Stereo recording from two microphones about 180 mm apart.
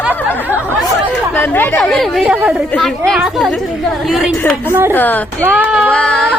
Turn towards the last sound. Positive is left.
turn(degrees=5)  # may be behind; listen again after turning